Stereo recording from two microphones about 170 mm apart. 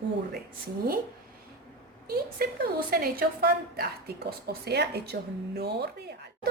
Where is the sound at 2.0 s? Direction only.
60° right (ahead or behind).